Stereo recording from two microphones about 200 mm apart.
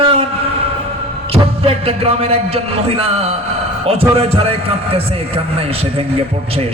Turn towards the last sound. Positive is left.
turn(degrees=-30)  # may be behind; listen again after turning